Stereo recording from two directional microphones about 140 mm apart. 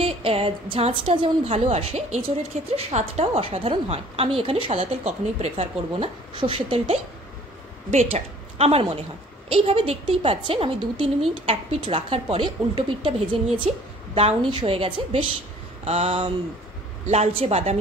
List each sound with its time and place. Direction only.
0.0 s a woman's voice: 45° right (ahead or behind)